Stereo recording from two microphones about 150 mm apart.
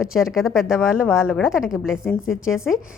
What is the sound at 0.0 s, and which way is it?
A woman's voice, 5° right (ahead or behind).